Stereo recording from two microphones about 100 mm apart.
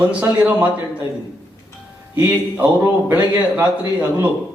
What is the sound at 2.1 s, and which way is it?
Speech, 15° right (ahead or behind).